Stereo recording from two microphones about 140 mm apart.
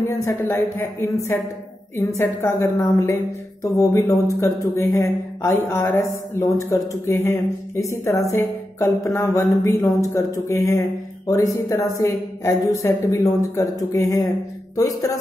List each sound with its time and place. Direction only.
0.0 s speech: 20° left (ahead or behind)